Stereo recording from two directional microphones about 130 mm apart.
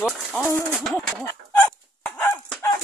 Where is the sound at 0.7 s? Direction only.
5° left (ahead or behind).